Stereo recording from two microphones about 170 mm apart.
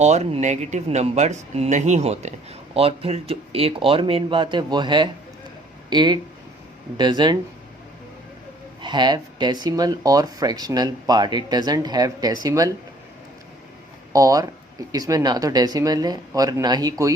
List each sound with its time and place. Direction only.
0.0 s speech: 40° right (ahead or behind)
8.8 s speech: 25° right (ahead or behind)
14.1 s speech: 20° right (ahead or behind)